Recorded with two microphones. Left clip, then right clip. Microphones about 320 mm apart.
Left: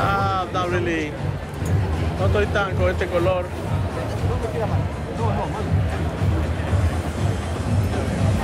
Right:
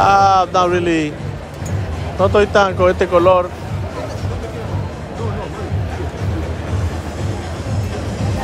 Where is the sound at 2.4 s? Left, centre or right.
Centre.